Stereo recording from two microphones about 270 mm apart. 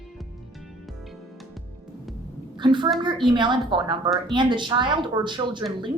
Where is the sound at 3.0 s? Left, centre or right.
Centre.